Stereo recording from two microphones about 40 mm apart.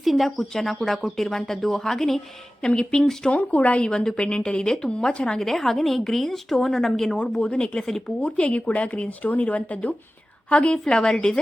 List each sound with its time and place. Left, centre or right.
0.0 s a woman's voice: centre
2.6 s a woman's voice: centre
3.3 s speech: left
3.8 s a woman's voice: left
5.4 s speech: centre
7.4 s a woman's voice: left
7.8 s speech: centre
8.0 s speech: left
10.9 s a woman's voice: centre